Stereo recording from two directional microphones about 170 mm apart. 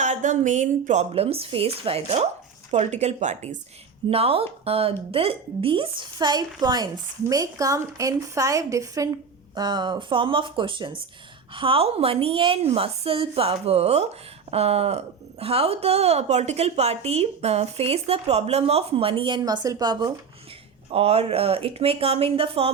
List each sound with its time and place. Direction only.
0.0 s a woman's voice: 45° right (ahead or behind); by 20.1 s 25° right (ahead or behind)
20.9 s a woman's voice: 35° right (ahead or behind)